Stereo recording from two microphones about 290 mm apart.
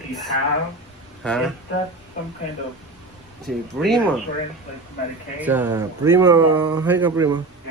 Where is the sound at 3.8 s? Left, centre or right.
Centre.